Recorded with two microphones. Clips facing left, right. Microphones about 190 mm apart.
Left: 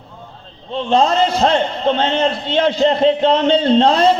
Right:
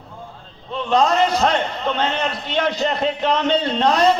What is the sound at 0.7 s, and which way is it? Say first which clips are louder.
A man's voice: left 3 dB; 25° left (ahead or behind).